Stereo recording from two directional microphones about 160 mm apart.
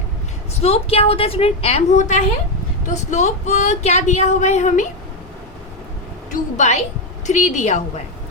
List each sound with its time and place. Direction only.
0.6 s a woman's voice: 40° left (ahead or behind)
6.6 s speech: 45° left (ahead or behind)